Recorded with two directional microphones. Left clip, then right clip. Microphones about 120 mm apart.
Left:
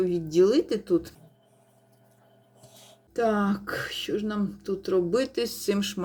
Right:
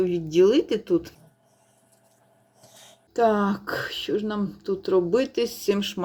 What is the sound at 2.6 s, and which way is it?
Speech, 5° right (ahead or behind).